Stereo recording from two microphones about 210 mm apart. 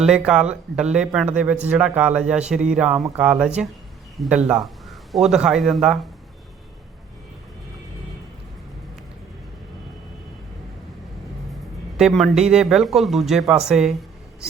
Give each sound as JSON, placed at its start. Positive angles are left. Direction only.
{"t": 0.0, "sound": "a man's voice", "side_deg": -5}
{"t": 11.9, "sound": "speech", "side_deg": 0}